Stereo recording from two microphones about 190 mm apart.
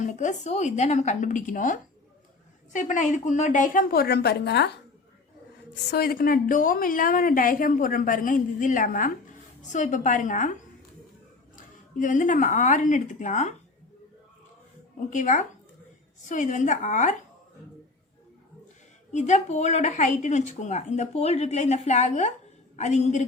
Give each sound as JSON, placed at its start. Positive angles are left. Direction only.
{"t": 0.0, "sound": "a woman's voice", "side_deg": 40}
{"t": 5.7, "sound": "a woman's voice", "side_deg": 55}
{"t": 11.5, "sound": "speech", "side_deg": 45}
{"t": 15.1, "sound": "speech", "side_deg": 40}
{"t": 19.1, "sound": "speech", "side_deg": 40}